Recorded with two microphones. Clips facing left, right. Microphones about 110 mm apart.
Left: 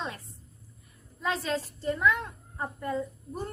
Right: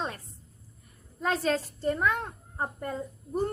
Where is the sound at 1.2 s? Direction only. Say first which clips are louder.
Right 3 dB; 45° right (ahead or behind).